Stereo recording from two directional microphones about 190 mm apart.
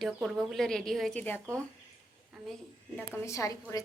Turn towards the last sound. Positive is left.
turn(degrees=15)  # may be behind; listen again after turning